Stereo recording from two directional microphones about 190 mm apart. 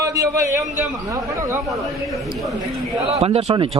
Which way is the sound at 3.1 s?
30° right (ahead or behind).